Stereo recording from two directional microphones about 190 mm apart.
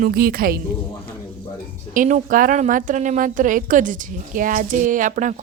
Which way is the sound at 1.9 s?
45° right (ahead or behind).